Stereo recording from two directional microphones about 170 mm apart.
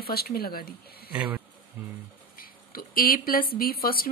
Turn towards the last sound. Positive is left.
turn(degrees=60)  # may be behind; listen again after turning